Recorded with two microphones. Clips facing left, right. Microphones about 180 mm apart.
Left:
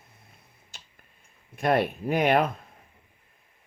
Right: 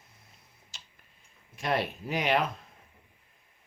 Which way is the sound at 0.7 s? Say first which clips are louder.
Left 3 dB; 55° left (ahead or behind).